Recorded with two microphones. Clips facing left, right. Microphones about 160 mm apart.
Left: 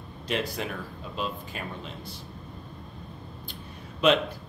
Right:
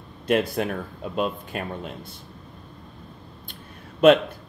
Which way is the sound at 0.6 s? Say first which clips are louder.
Right 7 dB; 50° right (ahead or behind).